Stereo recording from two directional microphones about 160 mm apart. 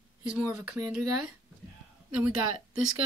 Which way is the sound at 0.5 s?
5° right (ahead or behind).